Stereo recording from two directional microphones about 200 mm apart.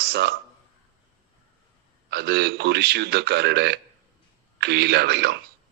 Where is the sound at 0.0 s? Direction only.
50° right (ahead or behind).